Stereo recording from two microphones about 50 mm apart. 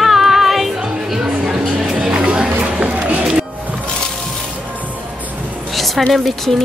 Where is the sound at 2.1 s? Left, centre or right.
Centre.